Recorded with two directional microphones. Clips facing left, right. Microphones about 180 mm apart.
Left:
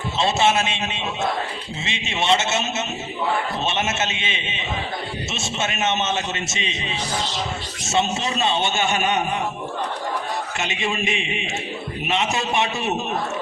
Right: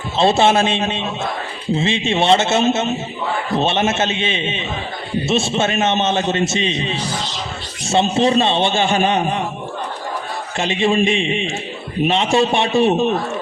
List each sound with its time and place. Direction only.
0.2 s a man's voice: 30° right (ahead or behind)
10.6 s a man's voice: 30° right (ahead or behind)